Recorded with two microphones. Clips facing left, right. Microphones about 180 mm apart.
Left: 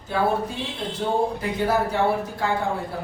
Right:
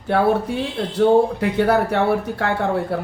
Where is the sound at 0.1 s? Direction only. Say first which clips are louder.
Right 5 dB; 70° right (ahead or behind).